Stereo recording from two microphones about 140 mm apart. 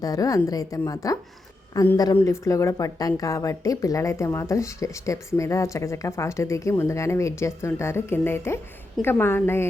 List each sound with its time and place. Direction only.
0.0 s a woman's voice: 25° left (ahead or behind)